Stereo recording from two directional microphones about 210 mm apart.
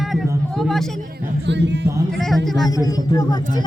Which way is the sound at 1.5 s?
55° right (ahead or behind).